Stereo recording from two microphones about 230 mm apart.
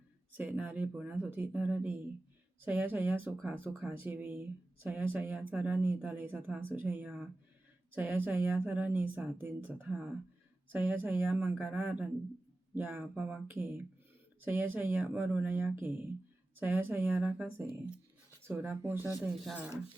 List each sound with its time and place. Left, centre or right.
0.3 s a woman's voice: centre